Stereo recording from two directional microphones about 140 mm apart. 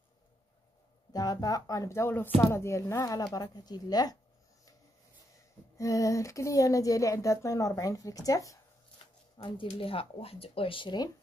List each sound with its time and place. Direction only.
1.1 s speech: 25° left (ahead or behind)
5.8 s speech: 25° left (ahead or behind)
9.4 s speech: 35° left (ahead or behind)